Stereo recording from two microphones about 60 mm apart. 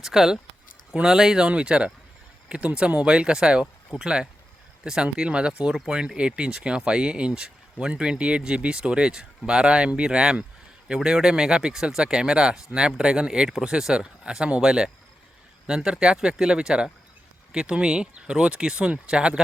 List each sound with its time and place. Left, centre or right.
0.0 s speech: centre